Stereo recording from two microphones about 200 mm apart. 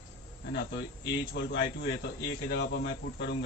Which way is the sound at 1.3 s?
60° left (ahead or behind).